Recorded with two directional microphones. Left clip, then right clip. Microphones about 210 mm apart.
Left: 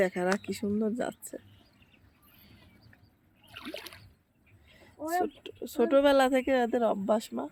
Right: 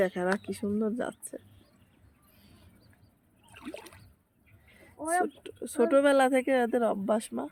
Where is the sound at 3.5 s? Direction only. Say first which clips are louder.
Left 2 dB; centre (ahead or behind).